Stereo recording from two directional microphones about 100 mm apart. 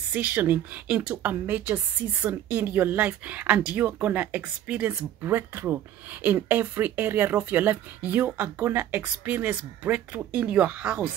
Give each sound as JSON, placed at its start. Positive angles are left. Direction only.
{"t": 0.1, "sound": "speech", "side_deg": -15}